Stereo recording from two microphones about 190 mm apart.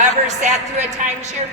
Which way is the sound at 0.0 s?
40° right (ahead or behind).